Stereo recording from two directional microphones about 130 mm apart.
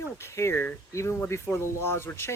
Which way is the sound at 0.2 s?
20° left (ahead or behind).